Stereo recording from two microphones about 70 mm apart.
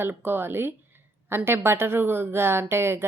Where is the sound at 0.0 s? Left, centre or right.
Right.